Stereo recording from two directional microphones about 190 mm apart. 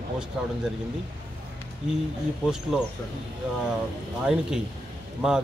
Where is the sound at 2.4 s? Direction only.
5° right (ahead or behind).